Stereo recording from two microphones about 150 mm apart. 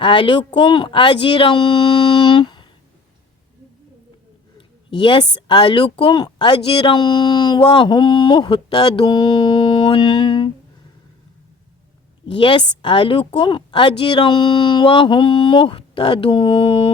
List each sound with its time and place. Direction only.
0.0 s a woman's voice: 35° left (ahead or behind)
4.5 s a woman's voice: 35° left (ahead or behind)
12.2 s a woman's voice: 35° left (ahead or behind)